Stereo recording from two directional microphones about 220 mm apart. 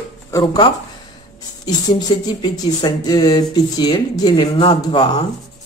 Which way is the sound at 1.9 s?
20° left (ahead or behind).